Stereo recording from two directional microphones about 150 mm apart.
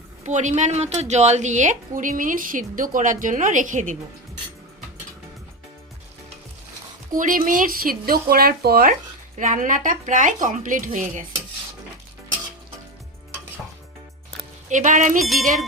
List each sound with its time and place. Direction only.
0.3 s a woman's voice: 50° right (ahead or behind)
7.2 s speech: 65° right (ahead or behind); by 9.0 s 80° right
9.4 s a woman's voice: 60° right (ahead or behind)
14.7 s a woman's voice: 55° right (ahead or behind)
15.2 s music: centre (ahead or behind)